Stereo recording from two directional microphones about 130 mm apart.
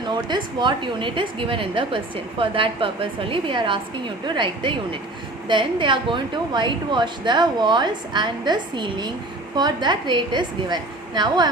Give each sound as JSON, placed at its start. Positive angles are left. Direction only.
{"t": 0.1, "sound": "a woman's voice", "side_deg": -35}